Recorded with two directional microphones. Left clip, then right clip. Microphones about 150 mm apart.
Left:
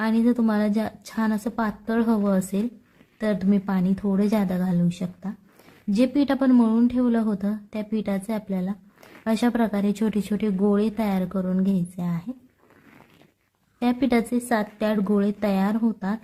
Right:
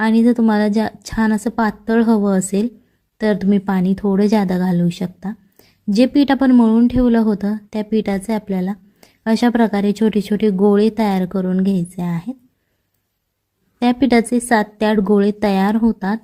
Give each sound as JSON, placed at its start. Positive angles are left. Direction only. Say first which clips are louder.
{"t": 0.0, "sound": "a woman's voice", "louder": "right 8 dB", "side_deg": -25}
{"t": 13.7, "sound": "a woman's voice", "louder": "right 8 dB", "side_deg": -30}